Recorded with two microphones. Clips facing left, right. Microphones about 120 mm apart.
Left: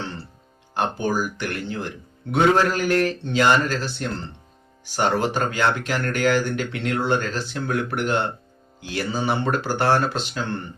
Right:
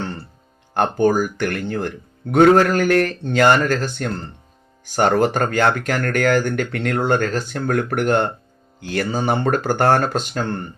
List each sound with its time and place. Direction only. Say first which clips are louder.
0.7 s speech: right 7 dB; 55° right (ahead or behind)